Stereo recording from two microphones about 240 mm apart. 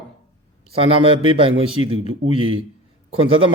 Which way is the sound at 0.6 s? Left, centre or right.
Right.